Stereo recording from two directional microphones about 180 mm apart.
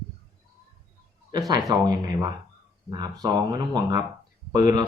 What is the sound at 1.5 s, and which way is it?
Speech, 25° right (ahead or behind).